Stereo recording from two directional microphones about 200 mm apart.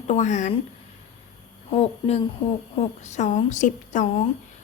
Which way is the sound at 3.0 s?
35° left (ahead or behind).